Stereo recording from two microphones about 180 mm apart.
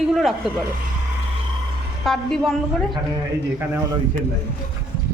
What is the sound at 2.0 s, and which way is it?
Speech, centre (ahead or behind).